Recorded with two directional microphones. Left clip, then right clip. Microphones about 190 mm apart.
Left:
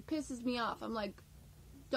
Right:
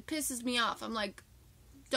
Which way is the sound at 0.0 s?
25° right (ahead or behind).